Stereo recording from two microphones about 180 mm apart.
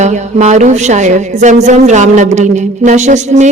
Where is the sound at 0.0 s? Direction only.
40° right (ahead or behind).